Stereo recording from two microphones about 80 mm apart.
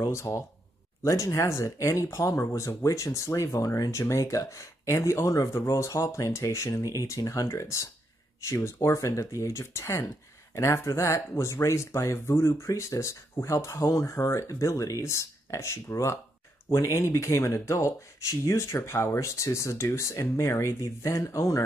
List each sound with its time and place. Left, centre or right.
0.1 s speech: left